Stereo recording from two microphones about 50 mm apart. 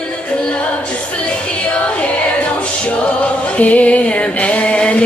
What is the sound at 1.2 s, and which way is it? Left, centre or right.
Music, left.